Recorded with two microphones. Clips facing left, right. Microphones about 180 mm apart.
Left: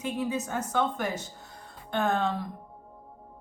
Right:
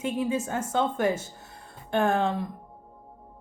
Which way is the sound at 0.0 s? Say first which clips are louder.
Right 3 dB; 25° right (ahead or behind).